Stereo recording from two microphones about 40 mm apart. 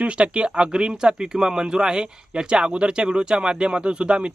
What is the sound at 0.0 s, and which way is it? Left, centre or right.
Speech, right.